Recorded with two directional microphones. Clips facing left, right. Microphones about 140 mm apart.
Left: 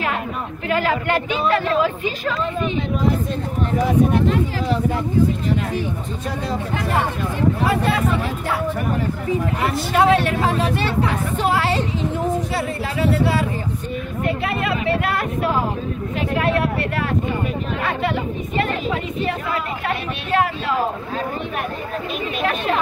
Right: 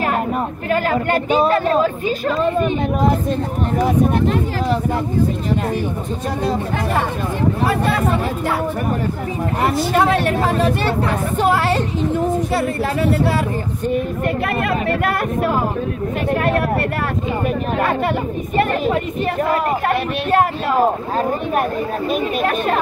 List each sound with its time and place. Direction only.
0.7 s a woman's voice: 45° right (ahead or behind)
9.6 s a woman's voice: 45° right (ahead or behind)
17.7 s a woman's voice: 50° right (ahead or behind)